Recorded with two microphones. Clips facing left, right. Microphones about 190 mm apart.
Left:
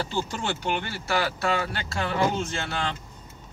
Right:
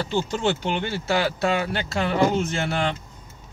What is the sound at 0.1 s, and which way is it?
Speech, 25° right (ahead or behind).